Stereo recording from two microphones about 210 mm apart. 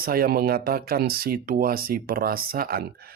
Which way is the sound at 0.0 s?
45° right (ahead or behind).